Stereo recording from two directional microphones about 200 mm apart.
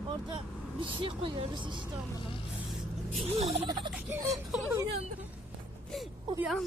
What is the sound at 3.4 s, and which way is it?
Turkey, 30° right (ahead or behind).